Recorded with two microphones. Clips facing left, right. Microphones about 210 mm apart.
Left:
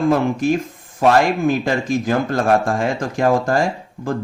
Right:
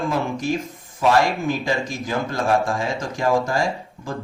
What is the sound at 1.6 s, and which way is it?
A man's voice, 55° left (ahead or behind).